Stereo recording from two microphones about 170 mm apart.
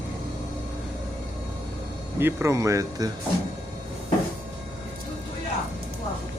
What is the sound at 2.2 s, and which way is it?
Speech, 15° right (ahead or behind).